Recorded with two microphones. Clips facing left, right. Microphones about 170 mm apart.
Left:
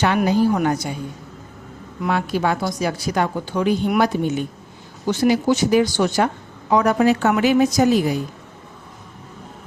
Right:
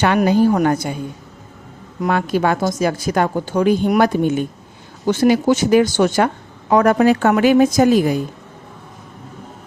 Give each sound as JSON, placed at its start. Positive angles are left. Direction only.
{"t": 0.5, "sound": "speech", "side_deg": -50}
{"t": 2.0, "sound": "speech", "side_deg": -50}